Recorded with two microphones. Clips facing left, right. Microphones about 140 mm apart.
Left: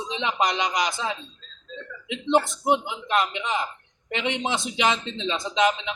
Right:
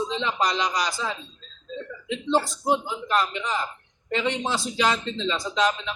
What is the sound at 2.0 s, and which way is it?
A man's voice, 20° left (ahead or behind).